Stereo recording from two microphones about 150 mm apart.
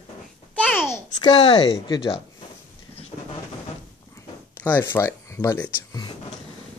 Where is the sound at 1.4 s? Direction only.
35° left (ahead or behind).